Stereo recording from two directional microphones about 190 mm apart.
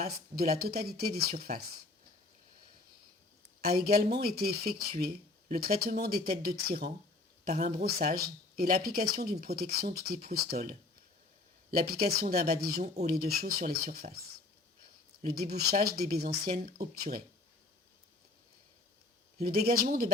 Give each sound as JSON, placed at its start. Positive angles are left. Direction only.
{"t": 0.0, "sound": "speech", "side_deg": -50}
{"t": 1.5, "sound": "speech", "side_deg": -35}
{"t": 3.6, "sound": "speech", "side_deg": -50}
{"t": 15.2, "sound": "speech", "side_deg": -55}
{"t": 19.4, "sound": "speech", "side_deg": -50}